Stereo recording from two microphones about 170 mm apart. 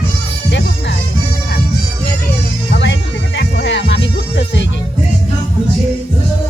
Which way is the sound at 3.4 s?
90° left.